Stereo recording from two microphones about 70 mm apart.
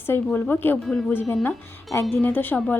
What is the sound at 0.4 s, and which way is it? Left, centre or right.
Speech, left.